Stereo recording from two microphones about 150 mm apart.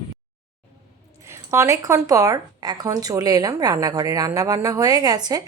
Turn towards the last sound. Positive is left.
turn(degrees=-25)  # may be behind; listen again after turning